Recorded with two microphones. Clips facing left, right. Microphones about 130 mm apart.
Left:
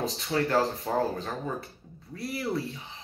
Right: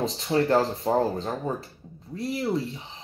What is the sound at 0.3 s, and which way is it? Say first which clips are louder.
Speech: right 4 dB; 30° right (ahead or behind).